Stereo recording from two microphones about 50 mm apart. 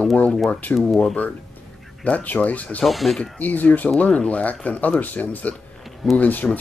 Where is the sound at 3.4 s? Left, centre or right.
Left.